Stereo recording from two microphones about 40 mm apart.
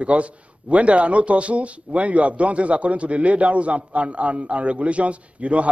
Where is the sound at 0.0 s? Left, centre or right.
Right.